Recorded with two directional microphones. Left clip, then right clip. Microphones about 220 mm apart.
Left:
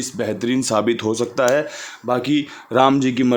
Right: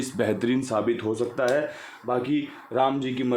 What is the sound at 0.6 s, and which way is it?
Speech, 35° left (ahead or behind).